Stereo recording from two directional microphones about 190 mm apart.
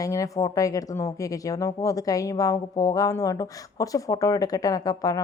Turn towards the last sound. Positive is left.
turn(degrees=20)  # may be behind; listen again after turning